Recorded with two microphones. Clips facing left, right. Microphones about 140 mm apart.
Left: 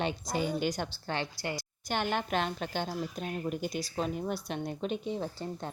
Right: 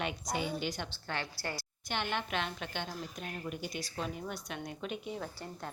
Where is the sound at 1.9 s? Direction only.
40° left (ahead or behind).